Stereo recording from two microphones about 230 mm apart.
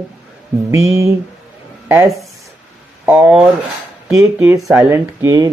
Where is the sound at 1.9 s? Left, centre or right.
Centre.